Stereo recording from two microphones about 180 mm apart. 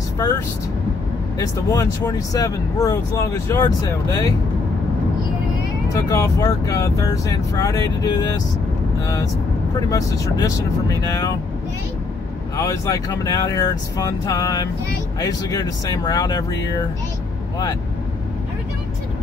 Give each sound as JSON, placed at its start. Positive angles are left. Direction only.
{"t": 1.4, "sound": "speech", "side_deg": 20}
{"t": 5.9, "sound": "speech", "side_deg": 20}
{"t": 12.5, "sound": "speech", "side_deg": 15}